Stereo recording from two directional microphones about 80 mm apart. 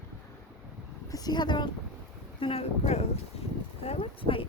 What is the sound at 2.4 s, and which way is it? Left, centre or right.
Speech, left.